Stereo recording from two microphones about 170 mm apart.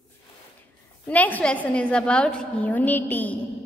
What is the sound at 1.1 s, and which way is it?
A woman's voice, 10° left (ahead or behind).